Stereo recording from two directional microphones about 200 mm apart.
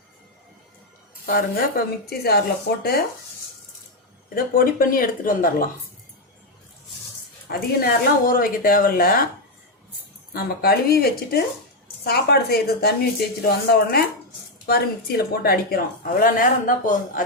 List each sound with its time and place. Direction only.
1.3 s speech: 50° left (ahead or behind)
4.4 s speech: 45° left (ahead or behind)
7.4 s speech: 50° left (ahead or behind)
10.3 s speech: 50° left (ahead or behind)